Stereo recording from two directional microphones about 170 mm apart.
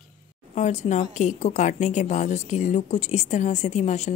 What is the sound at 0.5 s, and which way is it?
A woman's voice, 45° left (ahead or behind).